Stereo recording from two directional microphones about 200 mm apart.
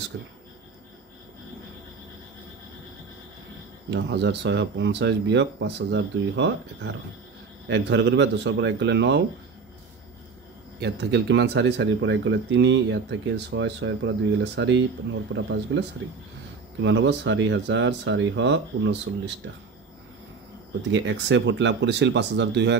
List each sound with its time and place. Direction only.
3.9 s speech: 60° right (ahead or behind)
10.8 s speech: 60° right (ahead or behind)
15.3 s speech: 75° right (ahead or behind)
16.8 s speech: 60° right (ahead or behind)
20.9 s speech: 65° right (ahead or behind)